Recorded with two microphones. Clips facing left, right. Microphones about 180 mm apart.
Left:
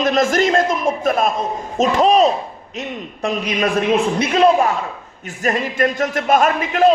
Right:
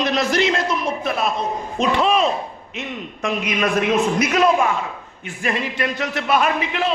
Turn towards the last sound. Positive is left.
turn(degrees=45)  # may be behind; listen again after turning